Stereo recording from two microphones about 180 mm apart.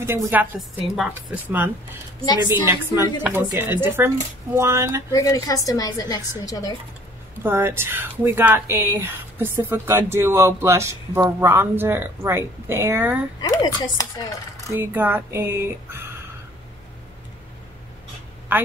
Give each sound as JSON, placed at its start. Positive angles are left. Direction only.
{"t": 0.0, "sound": "speech", "side_deg": -10}
{"t": 5.1, "sound": "a woman's voice", "side_deg": 20}
{"t": 7.4, "sound": "speech", "side_deg": -15}
{"t": 13.4, "sound": "a woman's voice", "side_deg": 20}
{"t": 14.7, "sound": "speech", "side_deg": -10}
{"t": 18.5, "sound": "a woman's voice", "side_deg": -10}